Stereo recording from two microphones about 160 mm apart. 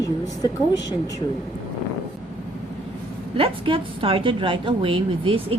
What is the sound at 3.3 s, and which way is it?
A woman's voice, 35° right (ahead or behind).